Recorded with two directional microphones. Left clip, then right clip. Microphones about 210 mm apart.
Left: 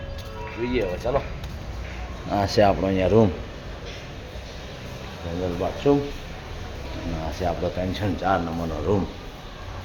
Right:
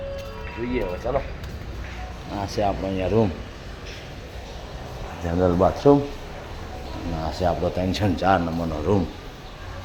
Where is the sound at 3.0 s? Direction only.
10° left (ahead or behind).